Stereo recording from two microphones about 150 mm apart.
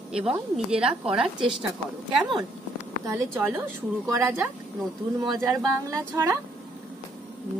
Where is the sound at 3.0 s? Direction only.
15° right (ahead or behind).